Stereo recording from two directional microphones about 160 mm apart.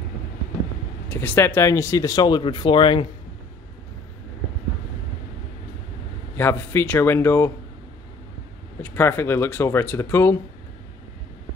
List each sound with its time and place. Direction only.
1.1 s speech: 10° left (ahead or behind); by 3.1 s 30° left (ahead or behind)
6.3 s speech: 15° left (ahead or behind)
8.8 s speech: 15° left (ahead or behind)